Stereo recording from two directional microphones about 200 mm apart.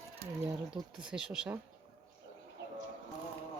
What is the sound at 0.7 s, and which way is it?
Speech, 5° right (ahead or behind).